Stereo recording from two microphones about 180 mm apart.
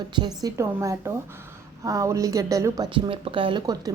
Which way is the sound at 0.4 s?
15° right (ahead or behind).